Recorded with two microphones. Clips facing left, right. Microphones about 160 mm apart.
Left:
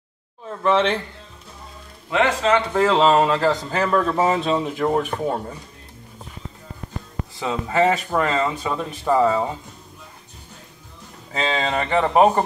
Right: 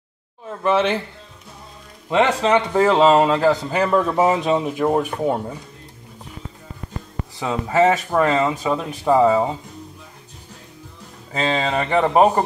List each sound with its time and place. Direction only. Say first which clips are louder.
0.7 s a man's voice: even; 10° right (ahead or behind)
2.0 s speech: right 2 dB; 25° right (ahead or behind)
2.7 s a man's voice: right 3 dB; 15° right (ahead or behind)
7.3 s a man's voice: right 2 dB; 10° right (ahead or behind)
11.9 s speech: right 1 dB; 5° right (ahead or behind)